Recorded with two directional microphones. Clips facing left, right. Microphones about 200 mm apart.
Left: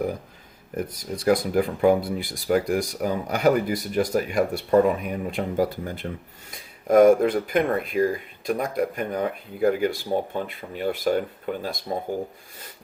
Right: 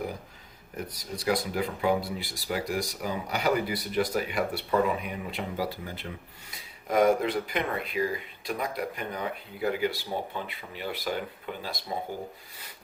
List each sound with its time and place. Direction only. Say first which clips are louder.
1.1 s speech: left 8 dB; 50° left (ahead or behind)